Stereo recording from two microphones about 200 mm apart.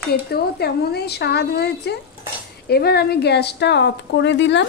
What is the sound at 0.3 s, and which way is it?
A woman's voice, 55° left (ahead or behind).